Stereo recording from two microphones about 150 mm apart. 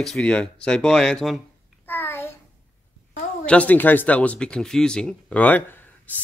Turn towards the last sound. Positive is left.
turn(degrees=10)  # may be behind; listen again after turning